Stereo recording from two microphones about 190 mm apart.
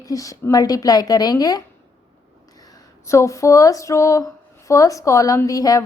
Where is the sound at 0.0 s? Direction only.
20° left (ahead or behind).